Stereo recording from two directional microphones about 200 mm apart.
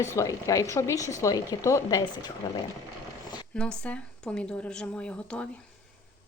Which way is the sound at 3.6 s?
5° left (ahead or behind).